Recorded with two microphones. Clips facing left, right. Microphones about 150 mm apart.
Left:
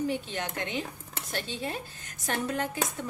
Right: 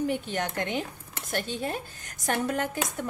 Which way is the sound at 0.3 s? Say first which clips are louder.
Right 4 dB; 50° right (ahead or behind).